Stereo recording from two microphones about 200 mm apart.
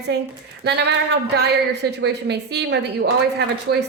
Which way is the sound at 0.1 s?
60° right (ahead or behind).